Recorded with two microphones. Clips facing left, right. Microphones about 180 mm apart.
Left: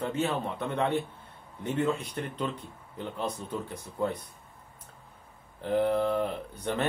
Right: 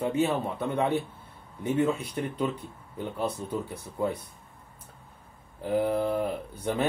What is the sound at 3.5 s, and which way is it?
Speech, 10° right (ahead or behind).